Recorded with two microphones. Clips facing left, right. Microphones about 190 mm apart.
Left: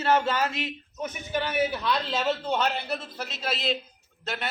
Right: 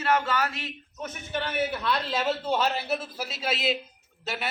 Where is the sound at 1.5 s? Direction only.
5° right (ahead or behind).